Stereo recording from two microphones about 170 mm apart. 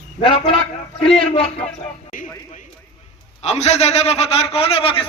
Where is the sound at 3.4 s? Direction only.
40° left (ahead or behind).